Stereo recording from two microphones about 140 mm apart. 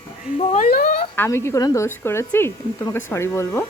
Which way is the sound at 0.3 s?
60° left (ahead or behind).